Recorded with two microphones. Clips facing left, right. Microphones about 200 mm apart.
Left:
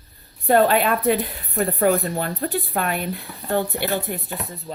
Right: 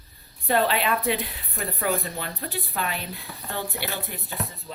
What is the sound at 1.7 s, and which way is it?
Speech, 50° left (ahead or behind).